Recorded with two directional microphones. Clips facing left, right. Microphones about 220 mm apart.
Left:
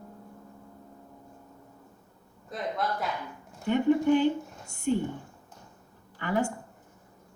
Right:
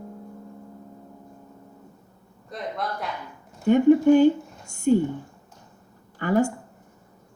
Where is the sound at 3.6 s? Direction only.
45° right (ahead or behind).